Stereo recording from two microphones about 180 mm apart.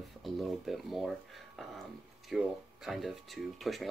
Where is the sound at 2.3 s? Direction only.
Centre (ahead or behind).